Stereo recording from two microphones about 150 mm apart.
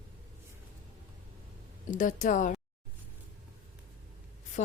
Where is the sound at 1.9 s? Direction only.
60° left (ahead or behind).